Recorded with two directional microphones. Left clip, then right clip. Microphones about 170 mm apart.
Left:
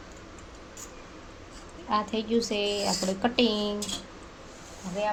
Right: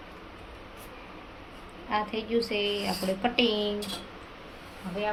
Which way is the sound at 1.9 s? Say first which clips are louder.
Left 2 dB; 55° left (ahead or behind).